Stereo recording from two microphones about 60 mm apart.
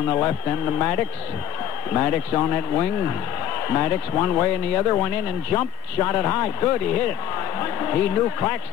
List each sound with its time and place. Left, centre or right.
0.1 s a man's voice: left
2.7 s speech: left
3.6 s a man's voice: left
4.1 s a man's voice: left